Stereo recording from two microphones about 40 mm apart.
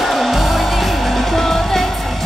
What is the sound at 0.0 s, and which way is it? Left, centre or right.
Music, centre.